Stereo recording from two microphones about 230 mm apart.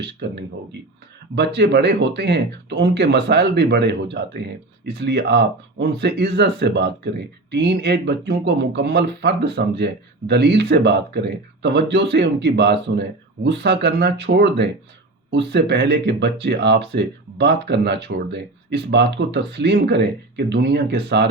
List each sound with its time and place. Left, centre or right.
0.0 s speech: right
1.4 s speech: right